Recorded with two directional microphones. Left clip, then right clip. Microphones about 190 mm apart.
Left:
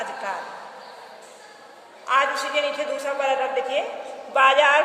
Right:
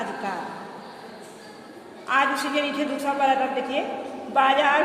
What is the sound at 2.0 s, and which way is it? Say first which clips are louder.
A woman's voice: left 1 dB; 10° left (ahead or behind).